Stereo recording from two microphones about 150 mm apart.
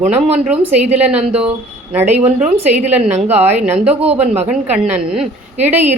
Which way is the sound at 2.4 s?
50° right (ahead or behind).